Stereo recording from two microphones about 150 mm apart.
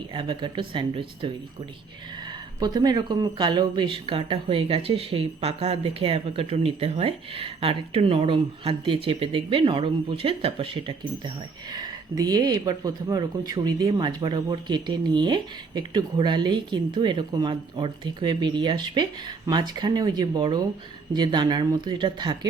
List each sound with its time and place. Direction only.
0.1 s speech: 35° right (ahead or behind)